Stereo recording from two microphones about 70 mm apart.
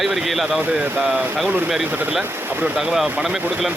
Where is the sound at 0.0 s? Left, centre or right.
Centre.